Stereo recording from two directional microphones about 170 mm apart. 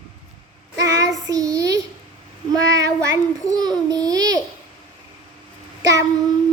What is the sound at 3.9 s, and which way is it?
Babbling, 20° right (ahead or behind).